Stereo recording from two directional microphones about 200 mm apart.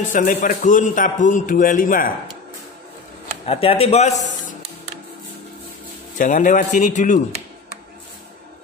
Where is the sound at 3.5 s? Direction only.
30° left (ahead or behind).